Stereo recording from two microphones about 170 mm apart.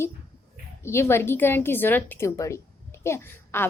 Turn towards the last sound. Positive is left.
turn(degrees=15)  # may be behind; listen again after turning